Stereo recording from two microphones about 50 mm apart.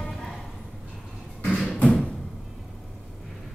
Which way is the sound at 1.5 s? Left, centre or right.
Centre.